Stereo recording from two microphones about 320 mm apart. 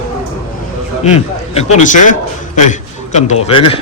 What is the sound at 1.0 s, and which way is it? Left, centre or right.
A man's voice, centre.